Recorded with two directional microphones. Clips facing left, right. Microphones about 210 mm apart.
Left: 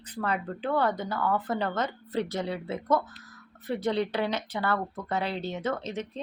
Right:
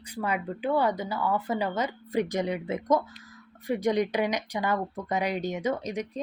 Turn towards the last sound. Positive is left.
turn(degrees=-10)  # may be behind; listen again after turning